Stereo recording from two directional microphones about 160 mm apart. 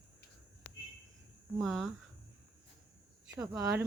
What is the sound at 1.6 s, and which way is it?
Speech, centre (ahead or behind).